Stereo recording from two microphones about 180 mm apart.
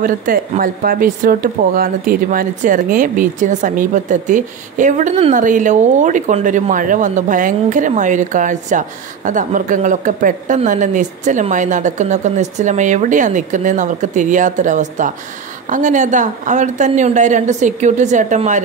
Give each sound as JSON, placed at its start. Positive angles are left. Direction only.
{"t": 0.0, "sound": "speech", "side_deg": -50}